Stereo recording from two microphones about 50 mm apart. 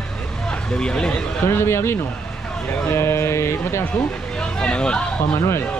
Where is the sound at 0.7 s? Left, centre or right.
Centre.